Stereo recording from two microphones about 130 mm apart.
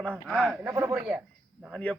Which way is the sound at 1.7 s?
10° left (ahead or behind).